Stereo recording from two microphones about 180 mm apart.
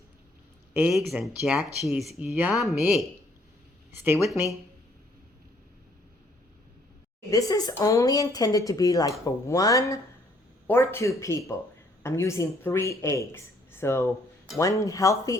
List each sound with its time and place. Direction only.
0.7 s speech: 5° right (ahead or behind)
3.9 s speech: 10° right (ahead or behind)
7.3 s speech: 20° left (ahead or behind)